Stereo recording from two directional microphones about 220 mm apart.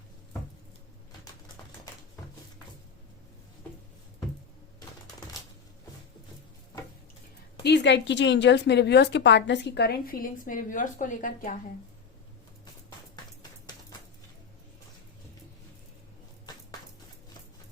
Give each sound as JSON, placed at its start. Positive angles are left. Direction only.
{"t": 7.6, "sound": "a woman's voice", "side_deg": 50}